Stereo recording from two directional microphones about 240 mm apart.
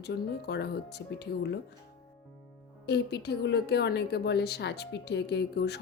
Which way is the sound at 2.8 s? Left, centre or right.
Left.